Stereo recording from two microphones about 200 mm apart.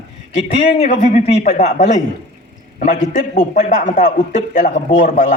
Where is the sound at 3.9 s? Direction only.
40° left (ahead or behind).